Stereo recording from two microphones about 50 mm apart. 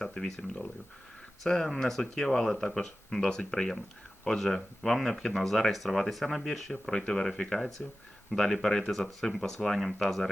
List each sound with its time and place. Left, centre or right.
0.0 s speech: centre
7.8 s speech: left
8.3 s speech: centre